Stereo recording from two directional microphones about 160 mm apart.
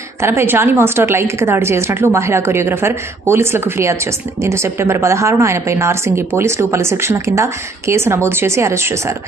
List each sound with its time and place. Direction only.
0.2 s a woman's voice: 15° right (ahead or behind)